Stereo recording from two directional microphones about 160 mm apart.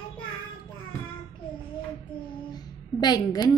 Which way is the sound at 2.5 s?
25° left (ahead or behind).